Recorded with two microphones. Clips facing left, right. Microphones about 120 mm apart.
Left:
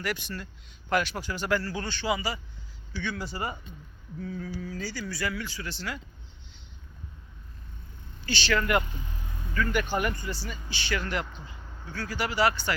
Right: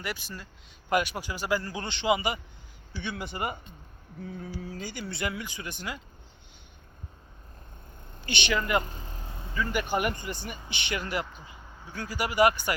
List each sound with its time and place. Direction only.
0.9 s speech: 10° right (ahead or behind)
1.6 s speech: 20° right (ahead or behind)
8.3 s speech: 20° right (ahead or behind)
8.5 s speech: centre (ahead or behind)
8.8 s vehicle: 35° right (ahead or behind)
9.6 s speech: 15° right (ahead or behind)